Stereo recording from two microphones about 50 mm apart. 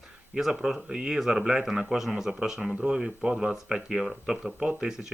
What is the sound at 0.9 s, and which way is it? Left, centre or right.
Speech, centre.